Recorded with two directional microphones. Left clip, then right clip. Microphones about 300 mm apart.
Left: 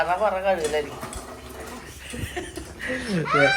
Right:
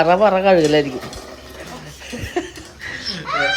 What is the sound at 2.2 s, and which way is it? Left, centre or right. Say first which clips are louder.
Laughter: right 9 dB; centre.